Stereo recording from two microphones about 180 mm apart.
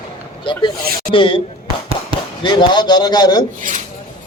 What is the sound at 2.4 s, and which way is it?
Speech, 25° left (ahead or behind).